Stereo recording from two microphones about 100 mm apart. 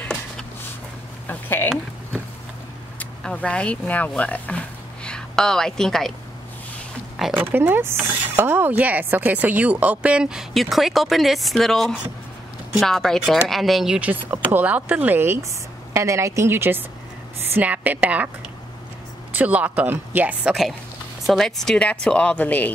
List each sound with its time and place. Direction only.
1.3 s a sound: 20° left (ahead or behind)
3.0 s speech: 15° left (ahead or behind)
7.3 s speech: 20° right (ahead or behind); by 13.9 s centre (ahead or behind)
13.9 s speech: 15° right (ahead or behind)
19.3 s speech: 15° right (ahead or behind)
21.3 s a woman's voice: 5° left (ahead or behind)